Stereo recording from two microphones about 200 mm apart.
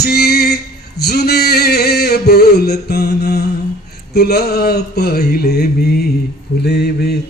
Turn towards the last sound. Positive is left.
turn(degrees=50)  # may be behind; listen again after turning